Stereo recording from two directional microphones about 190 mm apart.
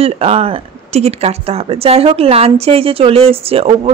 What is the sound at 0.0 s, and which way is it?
Speech, 30° right (ahead or behind).